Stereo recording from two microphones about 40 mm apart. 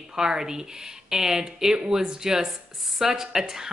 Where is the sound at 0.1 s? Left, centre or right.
Centre.